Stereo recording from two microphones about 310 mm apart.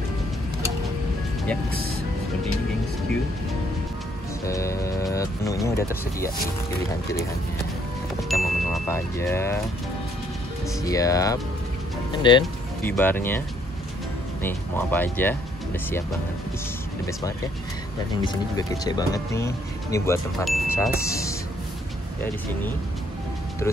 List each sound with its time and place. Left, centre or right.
4.5 s speech: centre
8.2 s speech: centre
10.9 s speech: centre
14.4 s speech: centre
18.2 s speech: centre